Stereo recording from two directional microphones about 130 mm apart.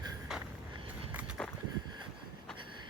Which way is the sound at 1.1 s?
10° right (ahead or behind).